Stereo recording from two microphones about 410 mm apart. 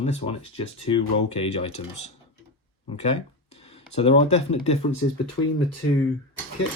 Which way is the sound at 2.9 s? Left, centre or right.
Centre.